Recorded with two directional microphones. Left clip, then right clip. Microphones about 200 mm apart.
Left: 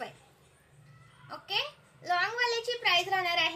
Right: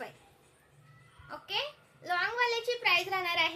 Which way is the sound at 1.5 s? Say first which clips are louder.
Left 2 dB; 15° right (ahead or behind).